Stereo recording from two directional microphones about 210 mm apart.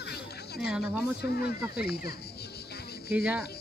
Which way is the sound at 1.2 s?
50° left (ahead or behind).